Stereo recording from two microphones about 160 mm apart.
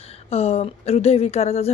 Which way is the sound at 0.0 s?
40° left (ahead or behind).